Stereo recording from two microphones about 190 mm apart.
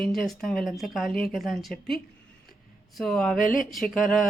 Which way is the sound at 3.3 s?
45° left (ahead or behind).